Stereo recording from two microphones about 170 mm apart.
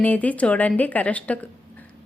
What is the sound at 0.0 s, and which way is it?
A woman's voice, 10° left (ahead or behind).